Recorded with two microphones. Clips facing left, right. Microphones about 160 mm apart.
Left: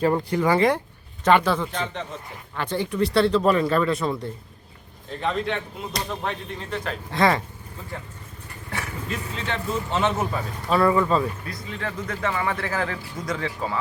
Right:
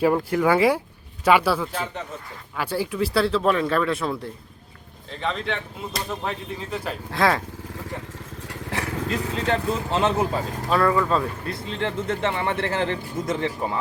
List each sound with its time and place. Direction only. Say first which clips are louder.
0.0 s speech: right 1 dB; 5° right (ahead or behind)
9.5 s speech: right 3 dB; 35° right (ahead or behind)
10.7 s speech: left 1 dB; centre (ahead or behind)
11.4 s speech: right 4 dB; 25° right (ahead or behind)